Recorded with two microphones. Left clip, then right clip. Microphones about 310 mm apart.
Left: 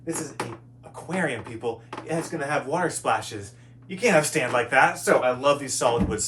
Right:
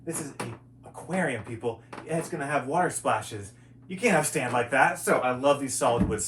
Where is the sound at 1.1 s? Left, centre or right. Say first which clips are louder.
Left 2 dB; centre.